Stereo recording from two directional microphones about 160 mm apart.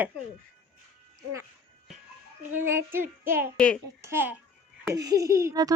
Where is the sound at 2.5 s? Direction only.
15° right (ahead or behind).